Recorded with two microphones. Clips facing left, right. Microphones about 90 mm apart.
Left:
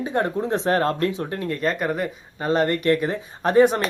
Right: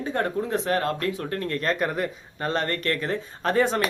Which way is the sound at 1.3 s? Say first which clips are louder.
Left 2 dB; 10° left (ahead or behind).